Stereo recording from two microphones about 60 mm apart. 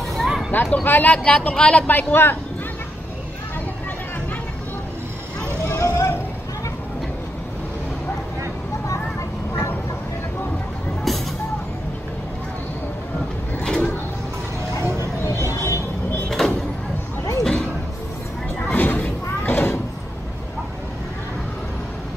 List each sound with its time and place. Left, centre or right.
0.5 s a man's voice: left; by 1.9 s centre
1.9 s a man's voice: left
5.8 s music: left
11.1 s vehicle: centre
13.6 s a sound: centre
15.2 s music: left
16.3 s a sound: centre
18.7 s slam: left